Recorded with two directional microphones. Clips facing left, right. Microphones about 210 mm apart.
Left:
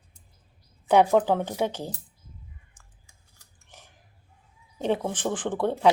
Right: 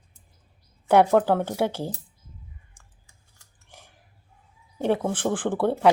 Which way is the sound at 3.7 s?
10° right (ahead or behind).